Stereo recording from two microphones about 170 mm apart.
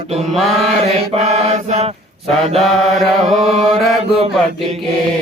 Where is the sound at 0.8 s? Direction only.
40° right (ahead or behind).